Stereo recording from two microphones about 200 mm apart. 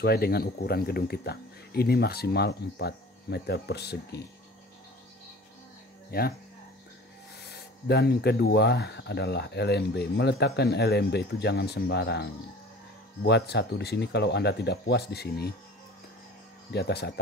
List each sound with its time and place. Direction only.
0.0 s speech: 50° left (ahead or behind)
6.1 s speech: 50° left (ahead or behind)
7.3 s speech: 55° left (ahead or behind)
16.7 s speech: 55° left (ahead or behind)